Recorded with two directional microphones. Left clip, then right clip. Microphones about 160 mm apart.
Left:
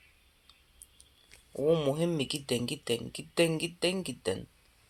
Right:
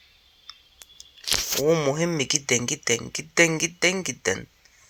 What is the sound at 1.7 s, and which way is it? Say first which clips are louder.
Speech: right 5 dB; 15° right (ahead or behind).